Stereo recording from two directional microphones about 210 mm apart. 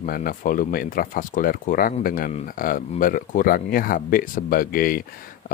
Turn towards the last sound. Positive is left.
turn(degrees=45)  # may be behind; listen again after turning